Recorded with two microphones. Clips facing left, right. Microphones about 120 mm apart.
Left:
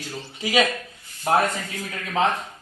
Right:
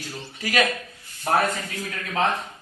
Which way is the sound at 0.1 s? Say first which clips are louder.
Left 3 dB; 5° left (ahead or behind).